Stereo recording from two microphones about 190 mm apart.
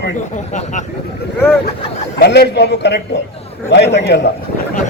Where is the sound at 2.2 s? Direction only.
60° left (ahead or behind).